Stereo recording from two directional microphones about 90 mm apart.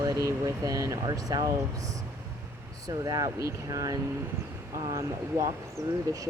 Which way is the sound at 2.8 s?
45° right (ahead or behind).